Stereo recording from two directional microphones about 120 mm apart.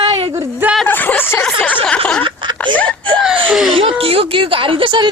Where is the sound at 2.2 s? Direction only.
40° right (ahead or behind).